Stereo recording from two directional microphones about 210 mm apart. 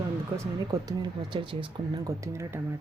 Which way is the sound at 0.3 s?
15° right (ahead or behind).